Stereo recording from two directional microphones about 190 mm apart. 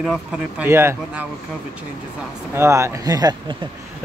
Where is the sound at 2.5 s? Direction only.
15° right (ahead or behind).